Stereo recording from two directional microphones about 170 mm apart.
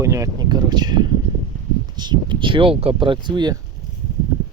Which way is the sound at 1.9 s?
25° right (ahead or behind).